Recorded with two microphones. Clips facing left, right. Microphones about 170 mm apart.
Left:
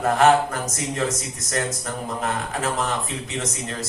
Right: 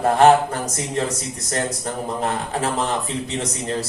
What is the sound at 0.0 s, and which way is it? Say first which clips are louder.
Speech: right 3 dB; 35° right (ahead or behind).